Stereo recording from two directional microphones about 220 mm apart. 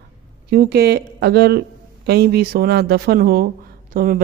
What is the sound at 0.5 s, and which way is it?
Speech, 45° right (ahead or behind).